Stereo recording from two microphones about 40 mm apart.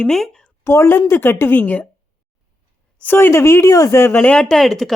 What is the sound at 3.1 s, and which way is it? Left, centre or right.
Speech, left.